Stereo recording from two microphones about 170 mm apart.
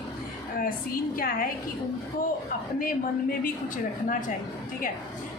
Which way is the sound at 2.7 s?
55° left (ahead or behind).